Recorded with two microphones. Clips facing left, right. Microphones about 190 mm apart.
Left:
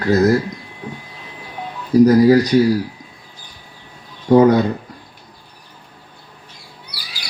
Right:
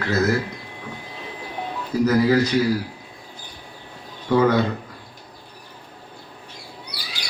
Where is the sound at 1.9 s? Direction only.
40° left (ahead or behind).